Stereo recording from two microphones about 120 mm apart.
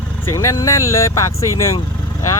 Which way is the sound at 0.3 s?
30° left (ahead or behind).